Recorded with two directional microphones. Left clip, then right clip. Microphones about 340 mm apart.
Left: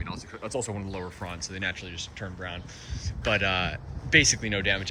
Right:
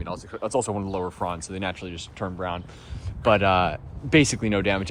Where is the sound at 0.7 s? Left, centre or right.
Right.